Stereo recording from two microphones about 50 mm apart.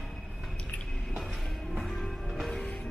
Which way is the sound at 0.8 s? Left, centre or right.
Centre.